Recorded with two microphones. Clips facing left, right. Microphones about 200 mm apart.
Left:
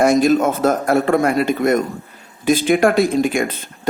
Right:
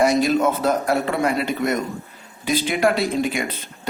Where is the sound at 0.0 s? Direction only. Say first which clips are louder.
Left 4 dB; 50° left (ahead or behind).